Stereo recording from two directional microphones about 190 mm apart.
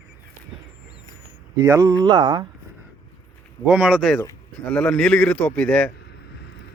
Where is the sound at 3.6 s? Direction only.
5° right (ahead or behind).